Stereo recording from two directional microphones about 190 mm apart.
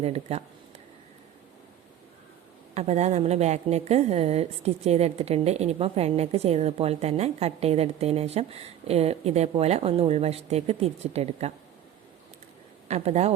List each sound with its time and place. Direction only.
0.0 s a woman's voice: 35° right (ahead or behind)
2.7 s a woman's voice: 35° right (ahead or behind)
12.9 s a woman's voice: 35° right (ahead or behind)